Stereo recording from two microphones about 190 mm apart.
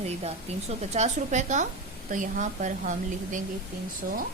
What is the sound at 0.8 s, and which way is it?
Speech, 35° right (ahead or behind).